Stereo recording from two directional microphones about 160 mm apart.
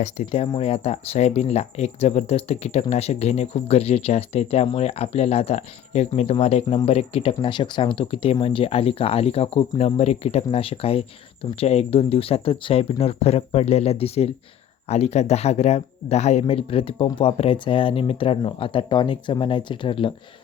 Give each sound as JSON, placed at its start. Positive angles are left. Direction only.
{"t": 0.0, "sound": "speech", "side_deg": 40}